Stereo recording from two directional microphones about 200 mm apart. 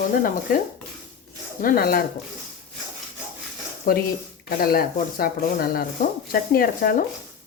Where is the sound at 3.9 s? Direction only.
45° left (ahead or behind).